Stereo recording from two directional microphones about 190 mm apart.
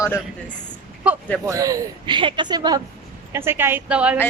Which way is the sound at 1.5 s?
15° right (ahead or behind).